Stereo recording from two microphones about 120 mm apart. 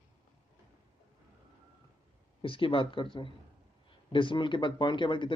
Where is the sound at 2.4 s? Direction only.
50° left (ahead or behind).